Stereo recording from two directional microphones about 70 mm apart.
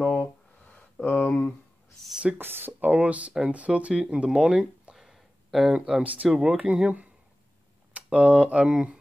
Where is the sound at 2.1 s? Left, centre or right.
Centre.